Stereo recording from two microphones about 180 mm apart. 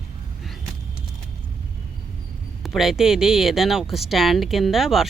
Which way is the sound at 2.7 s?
Centre (ahead or behind).